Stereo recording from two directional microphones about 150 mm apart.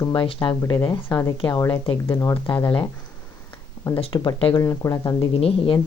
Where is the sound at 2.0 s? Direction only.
15° left (ahead or behind).